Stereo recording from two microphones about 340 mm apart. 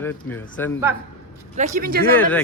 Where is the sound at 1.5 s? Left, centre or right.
Right.